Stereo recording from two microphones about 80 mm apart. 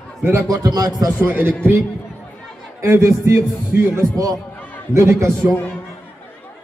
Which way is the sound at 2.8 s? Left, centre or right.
Right.